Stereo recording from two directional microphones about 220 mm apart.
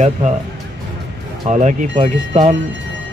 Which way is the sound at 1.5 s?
30° right (ahead or behind).